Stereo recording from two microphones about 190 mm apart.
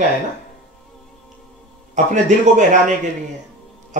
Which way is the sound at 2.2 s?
40° right (ahead or behind).